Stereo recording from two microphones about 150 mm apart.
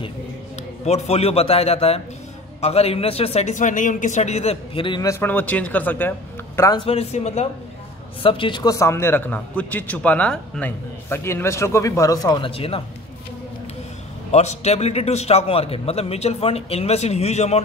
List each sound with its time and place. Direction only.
0.8 s a man's voice: 45° left (ahead or behind)
5.0 s a man's voice: 15° left (ahead or behind)
6.9 s a man's voice: 45° left (ahead or behind)
8.2 s a man's voice: 35° left (ahead or behind); by 10.7 s 5° left (ahead or behind)
11.1 s speech: 15° left (ahead or behind); by 12.8 s 40° left (ahead or behind)
14.3 s a man's voice: 50° left (ahead or behind)